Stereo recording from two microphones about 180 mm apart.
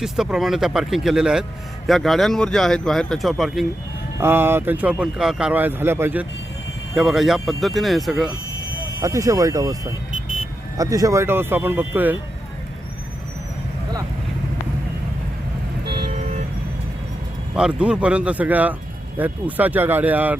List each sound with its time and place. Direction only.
0.0 s speech: 5° right (ahead or behind)
4.2 s speech: 10° right (ahead or behind)
9.0 s speech: 20° right (ahead or behind)
17.5 s speech: 5° right (ahead or behind)